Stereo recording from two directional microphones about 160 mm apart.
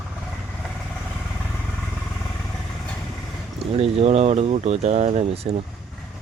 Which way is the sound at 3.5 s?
40° right (ahead or behind).